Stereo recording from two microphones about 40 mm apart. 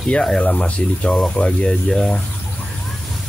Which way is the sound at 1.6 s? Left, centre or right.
Centre.